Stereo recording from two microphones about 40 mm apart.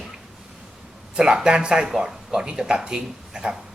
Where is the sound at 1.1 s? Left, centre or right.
Centre.